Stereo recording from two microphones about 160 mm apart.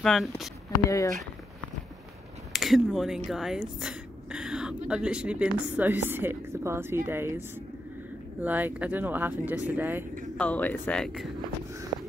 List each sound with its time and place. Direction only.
0.0 s speech: centre (ahead or behind)
0.8 s speech: 20° left (ahead or behind)
2.5 s speech: centre (ahead or behind)
10.3 s speech: 10° left (ahead or behind)